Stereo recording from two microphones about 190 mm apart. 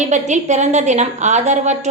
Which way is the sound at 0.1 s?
40° right (ahead or behind).